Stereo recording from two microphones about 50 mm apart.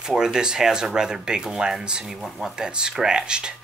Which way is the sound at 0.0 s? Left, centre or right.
Centre.